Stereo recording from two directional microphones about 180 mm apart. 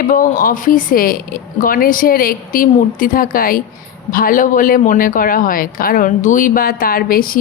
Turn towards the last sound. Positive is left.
turn(degrees=55)  # may be behind; listen again after turning